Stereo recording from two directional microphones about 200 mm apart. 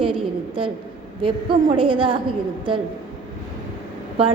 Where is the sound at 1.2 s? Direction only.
25° right (ahead or behind).